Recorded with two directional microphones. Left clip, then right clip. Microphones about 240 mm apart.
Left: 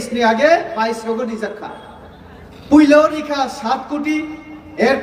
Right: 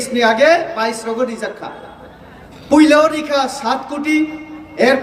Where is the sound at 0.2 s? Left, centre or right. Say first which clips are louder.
Right 1 dB; centre.